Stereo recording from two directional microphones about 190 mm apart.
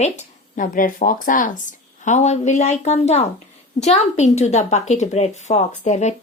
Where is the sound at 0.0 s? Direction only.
40° left (ahead or behind).